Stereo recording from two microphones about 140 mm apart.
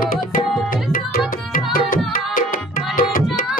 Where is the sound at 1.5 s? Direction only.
85° left.